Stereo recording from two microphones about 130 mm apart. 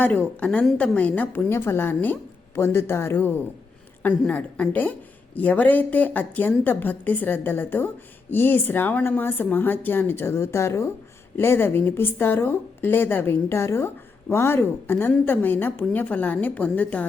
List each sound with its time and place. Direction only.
0.0 s a woman's voice: 10° left (ahead or behind)
0.6 s a woman's voice: centre (ahead or behind)
0.9 s a woman's voice: 10° left (ahead or behind)